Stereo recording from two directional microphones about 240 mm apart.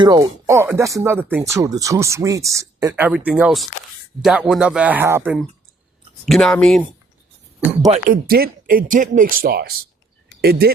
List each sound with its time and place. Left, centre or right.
0.0 s a man's voice: centre
7.9 s speech: right
8.3 s speech: right